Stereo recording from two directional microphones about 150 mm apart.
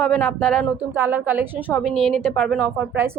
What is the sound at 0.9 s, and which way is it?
Speech, 15° right (ahead or behind).